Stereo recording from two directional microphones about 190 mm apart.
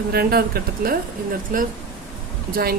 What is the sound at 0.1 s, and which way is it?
Speech, 55° right (ahead or behind).